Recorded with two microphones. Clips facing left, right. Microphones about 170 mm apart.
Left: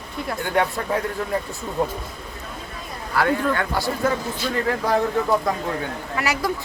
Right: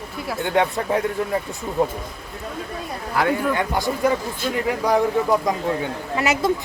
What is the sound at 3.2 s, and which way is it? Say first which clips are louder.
Speech: even; 15° right (ahead or behind).